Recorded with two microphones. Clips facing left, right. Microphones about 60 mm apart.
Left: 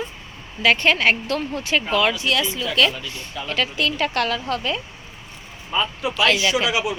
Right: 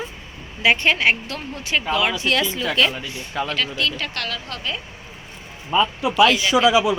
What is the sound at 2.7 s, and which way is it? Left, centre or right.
Speech, right.